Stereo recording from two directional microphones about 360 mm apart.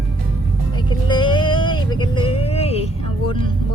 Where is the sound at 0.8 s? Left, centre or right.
Centre.